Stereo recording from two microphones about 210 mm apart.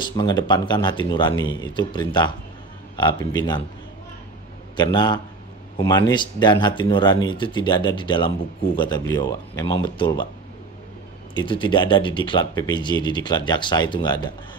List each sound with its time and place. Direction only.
0.0 s speech: 20° left (ahead or behind)
4.7 s speech: 20° left (ahead or behind)
11.3 s speech: 25° left (ahead or behind)